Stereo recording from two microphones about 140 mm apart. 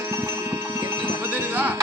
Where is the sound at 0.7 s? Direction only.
20° right (ahead or behind).